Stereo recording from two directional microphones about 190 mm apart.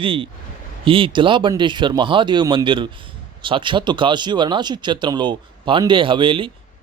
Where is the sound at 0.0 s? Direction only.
25° right (ahead or behind).